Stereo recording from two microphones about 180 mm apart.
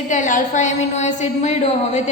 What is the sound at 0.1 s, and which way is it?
A woman's voice, 45° left (ahead or behind).